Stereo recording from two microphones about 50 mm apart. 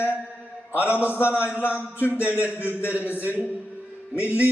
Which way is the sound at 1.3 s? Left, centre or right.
Left.